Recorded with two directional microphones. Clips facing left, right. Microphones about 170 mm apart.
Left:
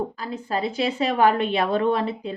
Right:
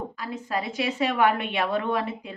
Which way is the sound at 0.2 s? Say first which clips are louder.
Left 3 dB; 30° left (ahead or behind).